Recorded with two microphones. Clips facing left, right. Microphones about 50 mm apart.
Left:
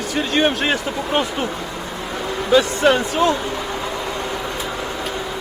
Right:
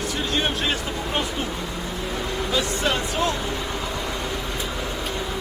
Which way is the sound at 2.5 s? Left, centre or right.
Left.